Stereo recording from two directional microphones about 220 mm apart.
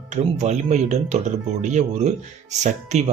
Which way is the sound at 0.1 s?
30° right (ahead or behind).